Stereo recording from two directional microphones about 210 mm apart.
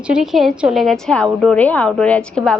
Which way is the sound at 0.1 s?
Centre (ahead or behind).